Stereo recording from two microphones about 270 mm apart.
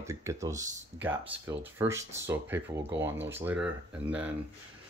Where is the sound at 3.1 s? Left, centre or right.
Right.